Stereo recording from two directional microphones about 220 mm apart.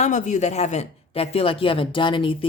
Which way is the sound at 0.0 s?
35° left (ahead or behind).